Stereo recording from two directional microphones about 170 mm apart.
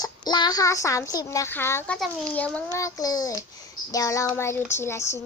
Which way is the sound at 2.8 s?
20° left (ahead or behind).